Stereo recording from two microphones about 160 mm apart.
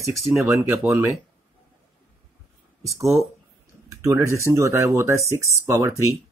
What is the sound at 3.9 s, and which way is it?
Speech, 20° right (ahead or behind).